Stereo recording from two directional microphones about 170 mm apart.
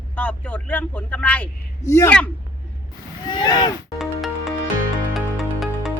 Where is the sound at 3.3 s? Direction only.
25° left (ahead or behind).